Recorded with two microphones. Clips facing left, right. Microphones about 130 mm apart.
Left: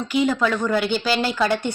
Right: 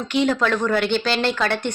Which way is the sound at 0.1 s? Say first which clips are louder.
Right 1 dB; 5° left (ahead or behind).